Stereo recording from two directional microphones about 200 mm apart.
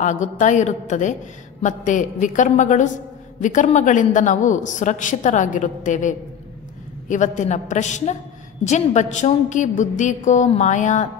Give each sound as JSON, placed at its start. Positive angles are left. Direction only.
{"t": 0.0, "sound": "a woman's voice", "side_deg": 35}